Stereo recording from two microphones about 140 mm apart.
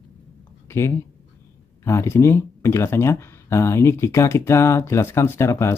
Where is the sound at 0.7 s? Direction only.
20° left (ahead or behind).